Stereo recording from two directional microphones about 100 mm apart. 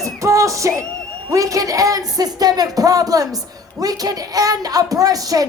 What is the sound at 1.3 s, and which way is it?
Speech, 35° right (ahead or behind).